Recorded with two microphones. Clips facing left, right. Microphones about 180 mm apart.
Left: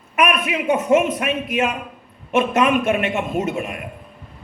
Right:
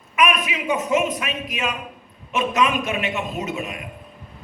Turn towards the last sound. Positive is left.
turn(degrees=55)  # may be behind; listen again after turning